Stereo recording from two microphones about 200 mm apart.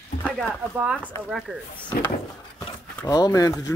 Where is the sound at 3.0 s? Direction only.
15° left (ahead or behind).